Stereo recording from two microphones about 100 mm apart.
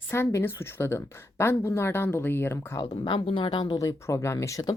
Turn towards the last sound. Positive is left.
turn(degrees=30)  # may be behind; listen again after turning